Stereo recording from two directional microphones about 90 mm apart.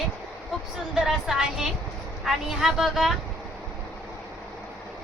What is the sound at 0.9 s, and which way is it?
A woman's voice, 5° right (ahead or behind).